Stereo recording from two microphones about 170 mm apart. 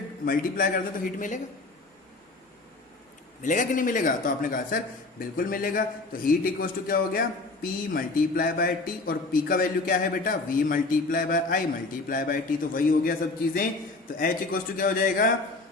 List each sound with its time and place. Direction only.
0.3 s speech: 55° left (ahead or behind)
3.4 s a man's voice: 50° left (ahead or behind)